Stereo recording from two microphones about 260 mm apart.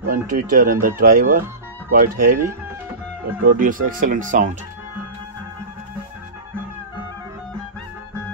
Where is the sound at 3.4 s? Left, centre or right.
Right.